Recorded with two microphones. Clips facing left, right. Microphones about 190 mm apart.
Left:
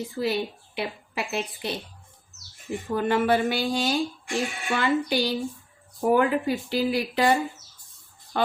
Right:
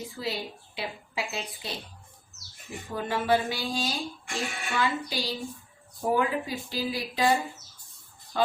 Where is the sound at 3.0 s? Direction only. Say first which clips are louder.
Left 3 dB; 65° left (ahead or behind).